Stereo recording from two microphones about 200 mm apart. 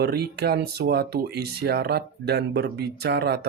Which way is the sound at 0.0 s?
55° right (ahead or behind).